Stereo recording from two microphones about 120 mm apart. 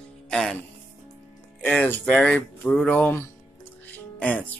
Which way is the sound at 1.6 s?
15° left (ahead or behind).